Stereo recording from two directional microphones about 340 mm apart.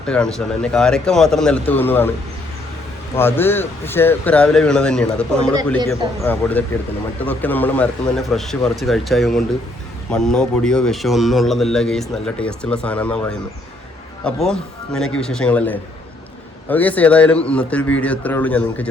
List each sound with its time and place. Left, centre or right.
0.0 s a man's voice: centre
3.2 s a man's voice: centre
14.3 s a man's voice: centre